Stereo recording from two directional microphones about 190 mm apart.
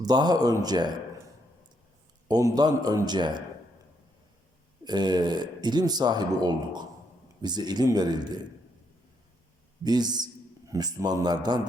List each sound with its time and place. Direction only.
0.0 s speech: 20° right (ahead or behind)
2.2 s speech: 20° right (ahead or behind)
4.9 s speech: 20° right (ahead or behind)
9.8 s speech: 20° right (ahead or behind)